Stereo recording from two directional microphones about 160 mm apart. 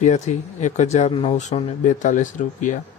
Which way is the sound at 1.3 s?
45° left (ahead or behind).